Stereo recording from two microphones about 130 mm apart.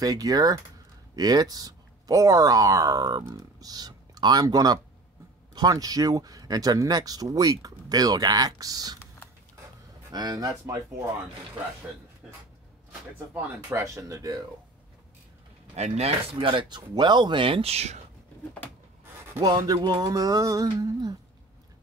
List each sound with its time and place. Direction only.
0.0 s speech: 30° right (ahead or behind)
10.1 s speech: 30° right (ahead or behind)
12.2 s speech: 5° right (ahead or behind)
13.3 s speech: 20° right (ahead or behind)
15.7 s speech: 55° right (ahead or behind)
16.3 s speech: 40° right (ahead or behind); by 18.0 s 55° right (ahead or behind)
19.3 s speech: 30° right (ahead or behind)